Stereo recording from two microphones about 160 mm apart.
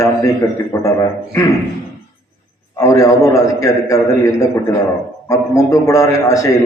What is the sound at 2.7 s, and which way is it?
A man's voice, 20° left (ahead or behind).